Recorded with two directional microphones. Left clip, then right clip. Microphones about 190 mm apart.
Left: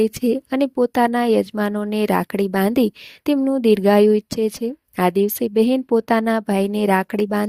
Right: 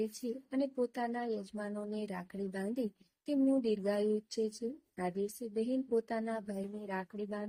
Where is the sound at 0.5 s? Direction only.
60° left (ahead or behind).